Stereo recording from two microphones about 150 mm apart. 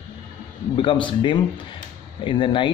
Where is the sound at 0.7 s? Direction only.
35° left (ahead or behind).